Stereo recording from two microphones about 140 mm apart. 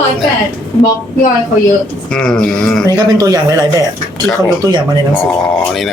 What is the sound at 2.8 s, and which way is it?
Speech, 25° right (ahead or behind).